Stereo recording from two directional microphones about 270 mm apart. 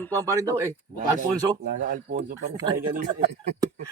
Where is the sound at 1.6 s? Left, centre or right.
Right.